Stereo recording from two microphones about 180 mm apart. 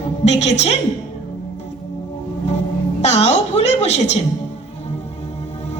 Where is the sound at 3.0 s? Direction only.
40° left (ahead or behind).